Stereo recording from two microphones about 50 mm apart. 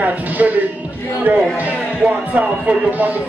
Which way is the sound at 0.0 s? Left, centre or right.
Right.